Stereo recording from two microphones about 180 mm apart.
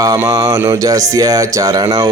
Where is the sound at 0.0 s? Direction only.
20° right (ahead or behind).